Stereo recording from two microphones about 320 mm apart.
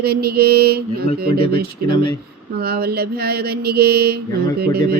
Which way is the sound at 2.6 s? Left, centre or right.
Right.